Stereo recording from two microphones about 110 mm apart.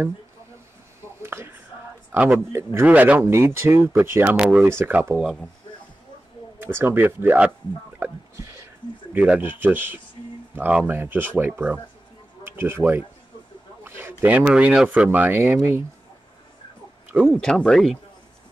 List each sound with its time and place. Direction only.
1.2 s a sound: 20° right (ahead or behind)
2.5 s speech: 15° right (ahead or behind)
4.4 s speech: 10° right (ahead or behind)
4.6 s speech: 20° right (ahead or behind)
5.2 s speech: centre (ahead or behind)
6.6 s speech: 20° right (ahead or behind)
9.1 s speech: 15° right (ahead or behind)
17.3 s speech: 5° left (ahead or behind)